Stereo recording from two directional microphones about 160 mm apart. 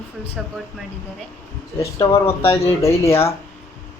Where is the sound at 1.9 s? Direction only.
15° left (ahead or behind).